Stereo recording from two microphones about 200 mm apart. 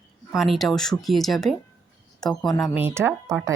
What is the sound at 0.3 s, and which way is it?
Speech, centre (ahead or behind).